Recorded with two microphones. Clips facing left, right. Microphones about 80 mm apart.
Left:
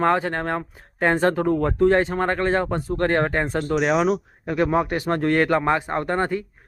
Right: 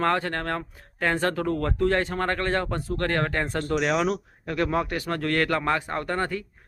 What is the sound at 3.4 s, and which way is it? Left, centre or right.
Speech, centre.